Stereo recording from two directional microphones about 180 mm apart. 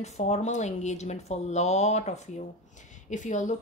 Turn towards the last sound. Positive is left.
turn(degrees=45)  # may be behind; listen again after turning